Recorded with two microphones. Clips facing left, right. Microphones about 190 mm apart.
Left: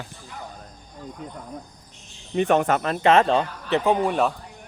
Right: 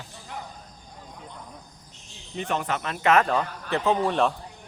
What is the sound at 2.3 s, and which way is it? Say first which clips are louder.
A man's voice: left 9 dB; 60° left (ahead or behind).